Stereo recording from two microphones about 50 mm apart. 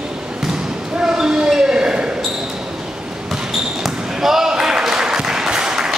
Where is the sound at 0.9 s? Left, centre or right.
Centre.